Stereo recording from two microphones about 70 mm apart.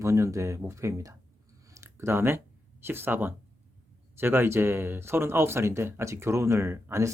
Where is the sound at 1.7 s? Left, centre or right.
Right.